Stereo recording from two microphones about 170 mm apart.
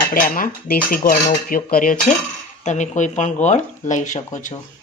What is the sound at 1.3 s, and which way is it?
Speech, 55° left (ahead or behind).